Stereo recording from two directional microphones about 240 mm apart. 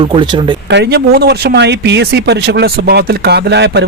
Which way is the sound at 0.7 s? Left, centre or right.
Right.